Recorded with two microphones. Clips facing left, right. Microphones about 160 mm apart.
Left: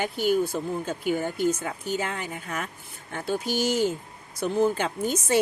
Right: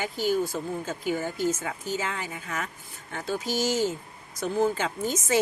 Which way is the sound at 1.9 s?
55° left (ahead or behind).